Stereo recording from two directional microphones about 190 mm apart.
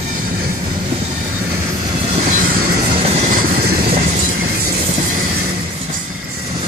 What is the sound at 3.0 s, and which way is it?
Train, 35° right (ahead or behind).